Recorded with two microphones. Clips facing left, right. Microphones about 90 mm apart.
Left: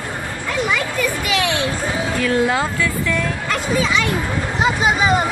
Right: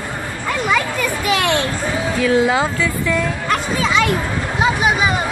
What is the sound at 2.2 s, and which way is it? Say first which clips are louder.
Speech: right 3 dB; 5° right (ahead or behind).